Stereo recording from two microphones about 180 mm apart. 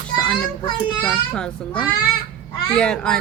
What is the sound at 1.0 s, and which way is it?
A child's voice, 5° left (ahead or behind).